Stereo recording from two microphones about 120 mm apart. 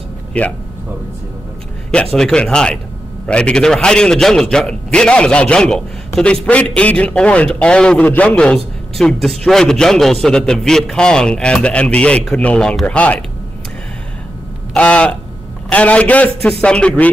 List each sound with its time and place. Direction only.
0.3 s a man's voice: 10° left (ahead or behind)
2.1 s a man's voice: 5° left (ahead or behind)
14.7 s a man's voice: 10° left (ahead or behind)